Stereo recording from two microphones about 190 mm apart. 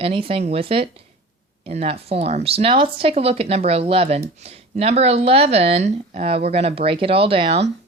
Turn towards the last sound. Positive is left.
turn(degrees=-30)  # may be behind; listen again after turning